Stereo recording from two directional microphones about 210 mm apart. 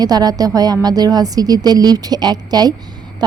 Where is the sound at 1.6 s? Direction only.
20° right (ahead or behind).